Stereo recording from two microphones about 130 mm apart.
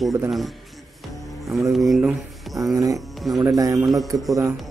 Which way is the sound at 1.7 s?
Centre (ahead or behind).